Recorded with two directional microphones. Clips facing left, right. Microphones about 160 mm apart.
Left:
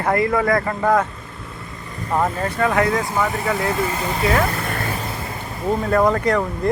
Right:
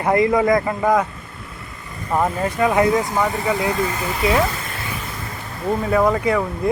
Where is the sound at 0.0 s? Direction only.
20° right (ahead or behind).